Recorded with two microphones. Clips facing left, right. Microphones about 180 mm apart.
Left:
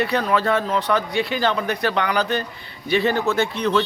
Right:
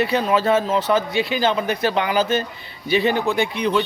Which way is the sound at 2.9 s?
Centre (ahead or behind).